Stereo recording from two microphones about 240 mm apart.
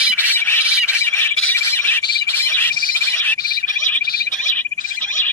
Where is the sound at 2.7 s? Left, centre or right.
Left.